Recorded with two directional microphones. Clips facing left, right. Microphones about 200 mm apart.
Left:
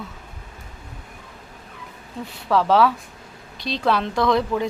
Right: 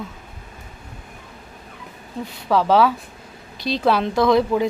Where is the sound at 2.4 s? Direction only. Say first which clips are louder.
Right 1 dB; 5° right (ahead or behind).